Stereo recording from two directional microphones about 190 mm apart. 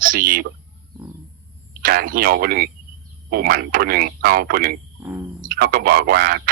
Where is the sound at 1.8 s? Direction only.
50° right (ahead or behind).